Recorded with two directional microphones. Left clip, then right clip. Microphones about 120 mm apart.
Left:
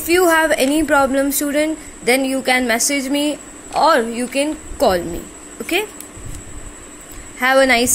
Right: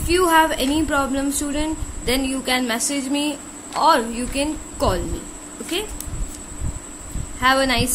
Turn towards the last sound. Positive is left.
turn(degrees=45)  # may be behind; listen again after turning